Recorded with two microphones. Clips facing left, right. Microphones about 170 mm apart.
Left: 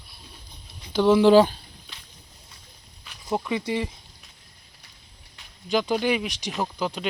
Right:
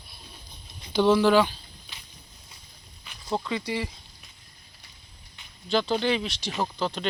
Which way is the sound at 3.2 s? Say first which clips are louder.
Left 3 dB; 15° left (ahead or behind).